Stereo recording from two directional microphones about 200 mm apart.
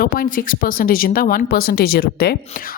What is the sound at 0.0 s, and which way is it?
Speech, 45° left (ahead or behind).